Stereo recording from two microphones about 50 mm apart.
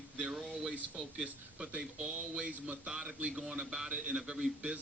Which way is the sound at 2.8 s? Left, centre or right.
Centre.